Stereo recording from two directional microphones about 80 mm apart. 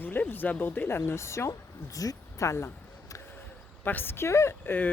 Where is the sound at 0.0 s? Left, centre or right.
Left.